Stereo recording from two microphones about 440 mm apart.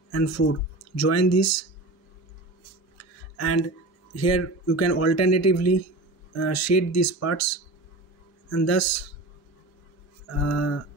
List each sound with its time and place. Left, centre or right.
0.1 s speech: left
3.0 s speech: left
10.3 s speech: left